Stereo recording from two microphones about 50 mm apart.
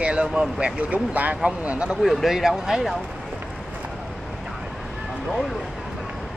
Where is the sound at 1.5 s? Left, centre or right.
Right.